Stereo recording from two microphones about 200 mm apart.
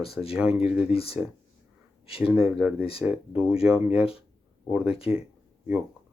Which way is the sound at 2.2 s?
5° right (ahead or behind).